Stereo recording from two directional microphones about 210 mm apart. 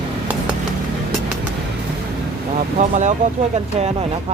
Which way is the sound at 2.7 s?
35° right (ahead or behind).